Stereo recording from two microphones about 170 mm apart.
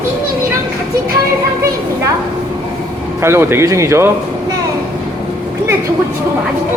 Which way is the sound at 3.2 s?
15° right (ahead or behind).